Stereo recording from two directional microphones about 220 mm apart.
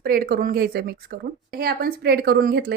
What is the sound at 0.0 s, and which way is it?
A woman's voice, 45° right (ahead or behind).